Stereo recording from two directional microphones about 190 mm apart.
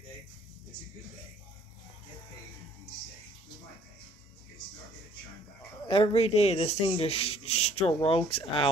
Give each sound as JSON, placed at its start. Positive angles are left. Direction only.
{"t": 5.9, "sound": "speech", "side_deg": 30}